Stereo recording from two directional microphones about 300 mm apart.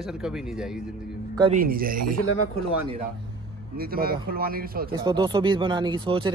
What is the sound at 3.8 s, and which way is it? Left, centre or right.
Speech, right.